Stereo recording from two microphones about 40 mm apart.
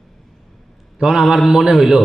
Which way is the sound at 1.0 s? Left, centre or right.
Right.